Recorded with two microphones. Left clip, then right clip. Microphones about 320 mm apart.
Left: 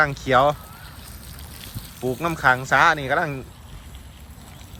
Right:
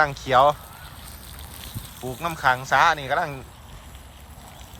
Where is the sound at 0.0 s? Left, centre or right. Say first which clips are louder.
Even; centre.